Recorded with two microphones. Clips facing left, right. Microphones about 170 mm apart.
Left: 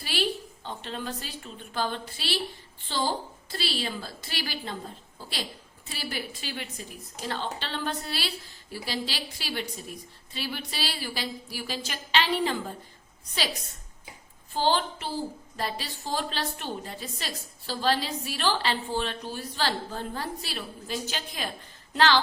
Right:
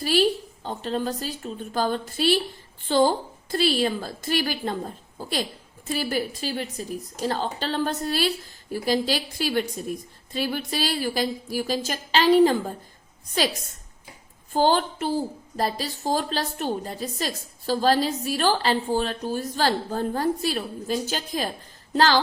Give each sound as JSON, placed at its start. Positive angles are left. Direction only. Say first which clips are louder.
{"t": 0.0, "sound": "a woman's voice", "louder": "right 9 dB", "side_deg": -40}
{"t": 14.5, "sound": "a woman's voice", "louder": "right 5 dB", "side_deg": -45}